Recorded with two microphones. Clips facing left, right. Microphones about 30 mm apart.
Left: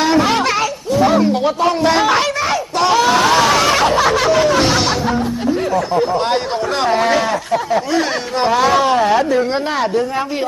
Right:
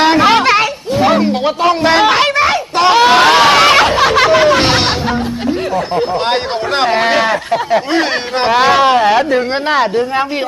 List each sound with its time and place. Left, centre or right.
0.0 s a sound: right
3.9 s music: right
5.7 s speech: right